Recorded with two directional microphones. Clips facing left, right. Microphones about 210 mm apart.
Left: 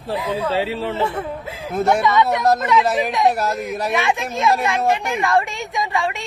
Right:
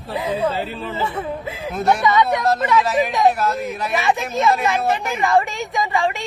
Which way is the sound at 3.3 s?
40° left (ahead or behind).